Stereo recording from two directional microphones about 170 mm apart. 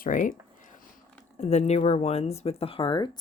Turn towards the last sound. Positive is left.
turn(degrees=30)  # may be behind; listen again after turning